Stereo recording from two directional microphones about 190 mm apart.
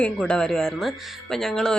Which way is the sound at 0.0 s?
5° left (ahead or behind).